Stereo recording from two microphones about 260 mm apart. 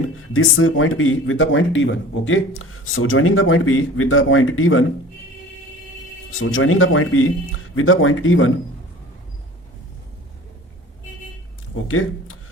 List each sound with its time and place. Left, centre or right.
0.3 s speech: left
6.4 s speech: left
11.9 s speech: left